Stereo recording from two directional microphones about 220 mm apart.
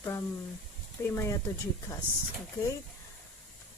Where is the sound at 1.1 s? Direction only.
10° left (ahead or behind).